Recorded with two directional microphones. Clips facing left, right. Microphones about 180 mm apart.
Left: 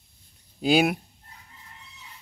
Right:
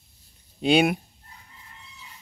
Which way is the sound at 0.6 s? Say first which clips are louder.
Right 1 dB; centre (ahead or behind).